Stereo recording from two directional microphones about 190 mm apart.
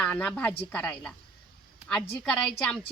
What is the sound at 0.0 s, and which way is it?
A woman's voice, 5° left (ahead or behind).